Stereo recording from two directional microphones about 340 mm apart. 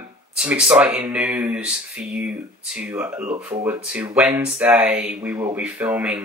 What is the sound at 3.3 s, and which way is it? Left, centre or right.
Speech, centre.